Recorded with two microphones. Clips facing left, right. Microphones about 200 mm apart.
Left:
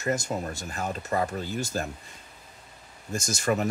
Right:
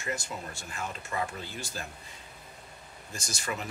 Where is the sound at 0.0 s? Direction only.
40° left (ahead or behind).